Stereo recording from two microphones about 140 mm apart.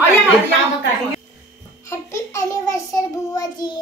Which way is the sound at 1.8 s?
20° left (ahead or behind).